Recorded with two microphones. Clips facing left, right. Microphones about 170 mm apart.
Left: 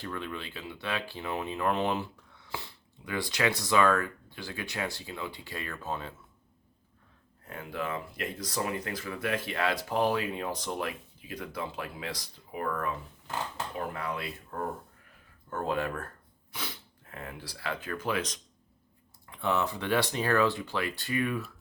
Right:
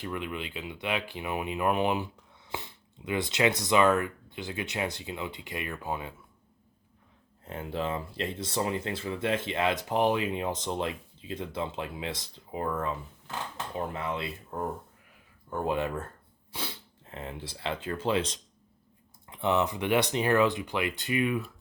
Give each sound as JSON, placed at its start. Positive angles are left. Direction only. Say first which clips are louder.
{"t": 0.0, "sound": "speech", "louder": "right 2 dB", "side_deg": -15}
{"t": 7.4, "sound": "speech", "louder": "right 3 dB", "side_deg": -25}